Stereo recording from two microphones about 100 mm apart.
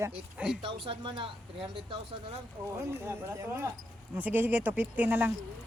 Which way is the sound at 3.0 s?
25° right (ahead or behind).